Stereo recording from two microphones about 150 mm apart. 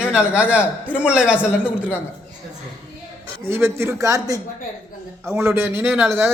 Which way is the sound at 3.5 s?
15° right (ahead or behind).